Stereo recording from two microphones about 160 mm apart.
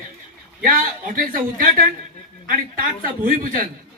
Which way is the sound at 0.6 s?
60° right (ahead or behind).